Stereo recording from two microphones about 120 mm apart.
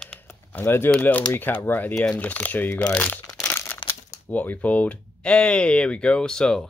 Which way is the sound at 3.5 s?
20° left (ahead or behind).